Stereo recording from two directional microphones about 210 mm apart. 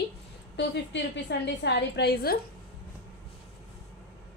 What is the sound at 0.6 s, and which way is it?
A woman's voice, 55° left (ahead or behind).